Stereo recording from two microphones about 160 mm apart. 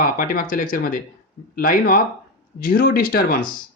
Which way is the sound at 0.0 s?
60° left (ahead or behind).